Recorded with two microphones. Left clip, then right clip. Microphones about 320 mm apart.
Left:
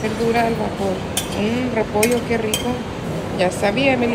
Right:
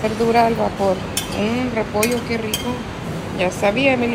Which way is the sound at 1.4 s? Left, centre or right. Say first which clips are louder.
Even; centre.